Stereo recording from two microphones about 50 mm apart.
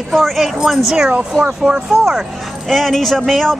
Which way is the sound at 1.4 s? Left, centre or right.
Right.